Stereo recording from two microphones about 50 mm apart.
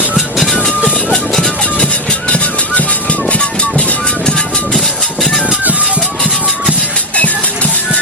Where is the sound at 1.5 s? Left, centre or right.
Left.